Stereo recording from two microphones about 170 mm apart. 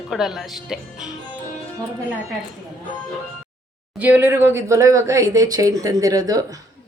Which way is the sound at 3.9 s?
10° right (ahead or behind).